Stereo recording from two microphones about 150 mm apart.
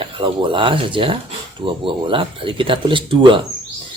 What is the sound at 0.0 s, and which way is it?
Speech, 35° right (ahead or behind).